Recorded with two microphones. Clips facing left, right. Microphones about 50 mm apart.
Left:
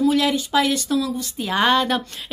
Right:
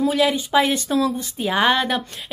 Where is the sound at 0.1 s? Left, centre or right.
Centre.